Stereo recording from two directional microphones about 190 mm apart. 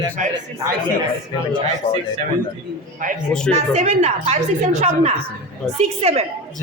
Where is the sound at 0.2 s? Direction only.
40° right (ahead or behind).